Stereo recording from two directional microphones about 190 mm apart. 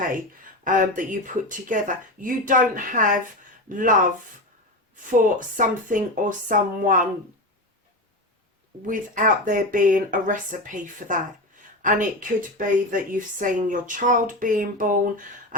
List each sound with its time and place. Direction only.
0.6 s a woman's voice: 45° right (ahead or behind)
5.1 s a woman's voice: 45° right (ahead or behind)
8.9 s a woman's voice: 45° right (ahead or behind)